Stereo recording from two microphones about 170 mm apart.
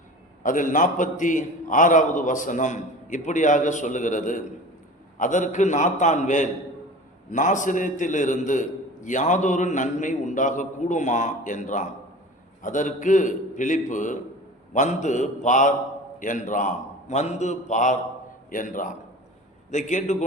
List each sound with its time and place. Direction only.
0.4 s a man's voice: 50° left (ahead or behind)